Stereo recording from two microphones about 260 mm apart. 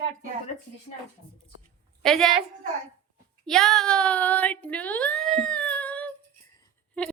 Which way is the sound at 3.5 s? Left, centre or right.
Centre.